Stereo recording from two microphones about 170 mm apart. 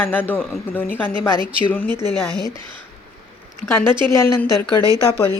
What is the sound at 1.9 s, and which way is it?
Speech, 25° right (ahead or behind).